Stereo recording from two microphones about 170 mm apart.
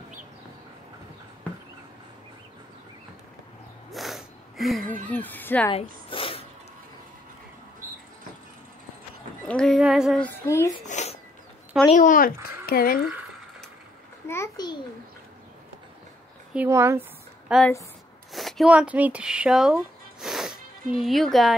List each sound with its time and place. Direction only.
3.9 s snort: centre (ahead or behind)
5.1 s speech: 10° left (ahead or behind)
5.7 s a sound: 30° left (ahead or behind)
9.5 s speech: 5° left (ahead or behind)
10.2 s speech: 15° left (ahead or behind)
10.9 s a sound: 40° left (ahead or behind)
11.9 s speech: 50° left (ahead or behind)
14.2 s a sound: 15° left (ahead or behind)
16.5 s speech: 15° right (ahead or behind)
17.5 s speech: 5° right (ahead or behind)
18.3 s a sound: centre (ahead or behind)
21.0 s speech: centre (ahead or behind)